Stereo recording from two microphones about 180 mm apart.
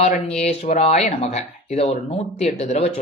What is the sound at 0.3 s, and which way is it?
Speech, 35° left (ahead or behind).